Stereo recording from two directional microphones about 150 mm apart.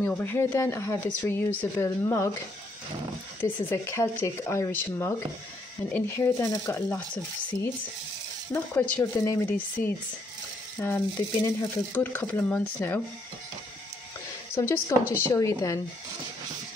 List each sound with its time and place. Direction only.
0.0 s speech: 15° left (ahead or behind)
3.4 s speech: 15° left (ahead or behind)
8.5 s speech: 15° left (ahead or behind)
14.5 s speech: 15° left (ahead or behind)